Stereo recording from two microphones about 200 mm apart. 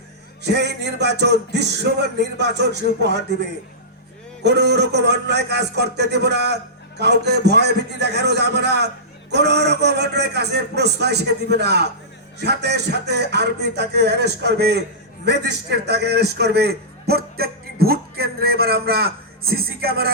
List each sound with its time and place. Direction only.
0.4 s a man's voice: 55° right (ahead or behind)
4.4 s a man's voice: 55° right (ahead or behind)